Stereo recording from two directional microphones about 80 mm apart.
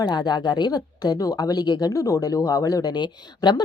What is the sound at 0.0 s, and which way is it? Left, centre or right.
Speech, left.